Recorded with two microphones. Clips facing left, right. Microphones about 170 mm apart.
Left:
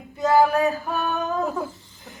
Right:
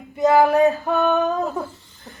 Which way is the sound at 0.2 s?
20° right (ahead or behind).